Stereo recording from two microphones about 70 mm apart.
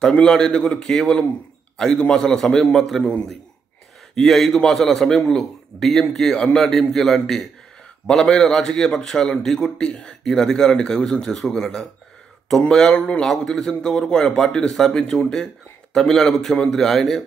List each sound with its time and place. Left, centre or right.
0.0 s a man's voice: centre
4.2 s a man's voice: centre